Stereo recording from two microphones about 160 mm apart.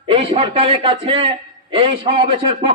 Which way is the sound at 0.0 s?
35° right (ahead or behind).